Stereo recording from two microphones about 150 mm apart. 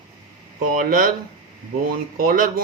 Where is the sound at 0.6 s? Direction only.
70° right (ahead or behind).